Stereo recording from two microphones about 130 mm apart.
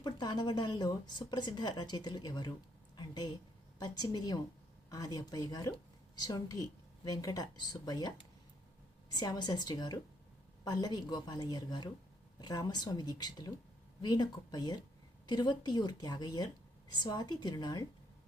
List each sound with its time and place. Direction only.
0.0 s a woman's voice: 30° left (ahead or behind)